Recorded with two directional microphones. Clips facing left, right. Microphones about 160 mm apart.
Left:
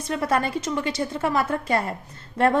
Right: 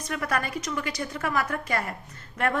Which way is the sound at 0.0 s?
25° left (ahead or behind).